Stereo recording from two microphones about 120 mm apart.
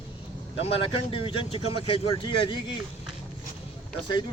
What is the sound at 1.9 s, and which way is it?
Speech, 40° left (ahead or behind).